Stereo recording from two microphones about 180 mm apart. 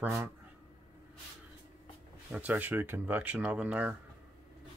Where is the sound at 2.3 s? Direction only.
10° right (ahead or behind).